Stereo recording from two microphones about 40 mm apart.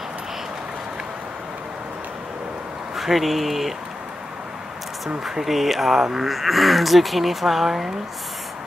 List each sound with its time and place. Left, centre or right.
3.0 s speech: centre
5.3 s speech: centre